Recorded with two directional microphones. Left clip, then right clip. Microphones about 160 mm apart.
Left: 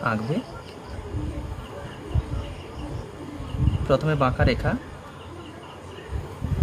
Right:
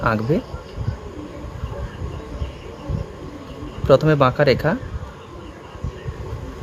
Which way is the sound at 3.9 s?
50° right (ahead or behind).